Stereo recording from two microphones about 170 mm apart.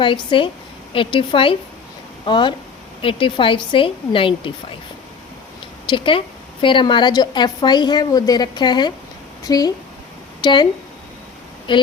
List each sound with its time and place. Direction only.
0.0 s a woman's voice: 30° left (ahead or behind)
5.9 s a woman's voice: 30° left (ahead or behind)
11.7 s a woman's voice: 30° left (ahead or behind)